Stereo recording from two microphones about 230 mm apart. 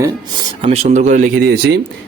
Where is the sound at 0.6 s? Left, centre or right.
Right.